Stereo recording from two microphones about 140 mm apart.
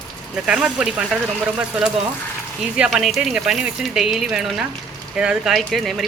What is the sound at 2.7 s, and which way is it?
Speech, 5° right (ahead or behind).